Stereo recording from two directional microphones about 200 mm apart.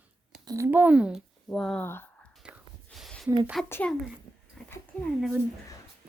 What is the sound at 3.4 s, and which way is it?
Speech, centre (ahead or behind).